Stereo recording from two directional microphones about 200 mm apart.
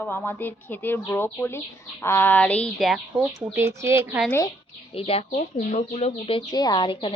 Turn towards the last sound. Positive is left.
turn(degrees=25)  # may be behind; listen again after turning